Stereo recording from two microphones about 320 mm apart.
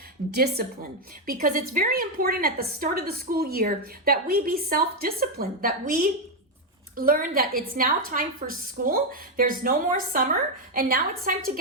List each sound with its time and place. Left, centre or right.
0.3 s a woman's voice: right